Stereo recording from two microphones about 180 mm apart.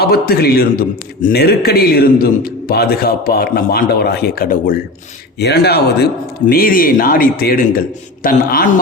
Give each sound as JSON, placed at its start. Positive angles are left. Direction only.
{"t": 0.0, "sound": "a man's voice", "side_deg": 60}
{"t": 5.4, "sound": "a man's voice", "side_deg": 65}